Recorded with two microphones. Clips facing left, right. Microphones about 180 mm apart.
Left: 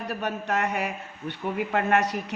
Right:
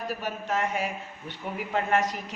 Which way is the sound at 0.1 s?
65° left (ahead or behind).